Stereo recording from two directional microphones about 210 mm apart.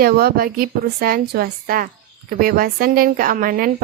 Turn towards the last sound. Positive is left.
turn(degrees=-40)  # may be behind; listen again after turning